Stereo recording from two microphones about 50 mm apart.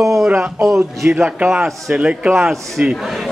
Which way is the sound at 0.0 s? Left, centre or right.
Centre.